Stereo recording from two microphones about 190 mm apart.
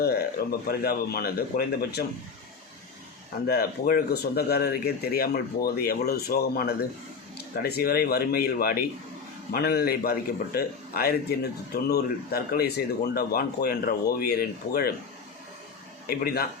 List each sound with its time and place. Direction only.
0.0 s speech: 55° left (ahead or behind)
3.4 s a man's voice: 55° left (ahead or behind)
16.0 s a man's voice: 50° left (ahead or behind)